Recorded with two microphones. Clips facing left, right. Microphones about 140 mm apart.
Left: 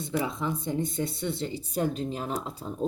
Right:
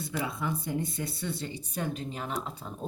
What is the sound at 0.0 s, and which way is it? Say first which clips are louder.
A woman's voice: left 4 dB; 20° left (ahead or behind).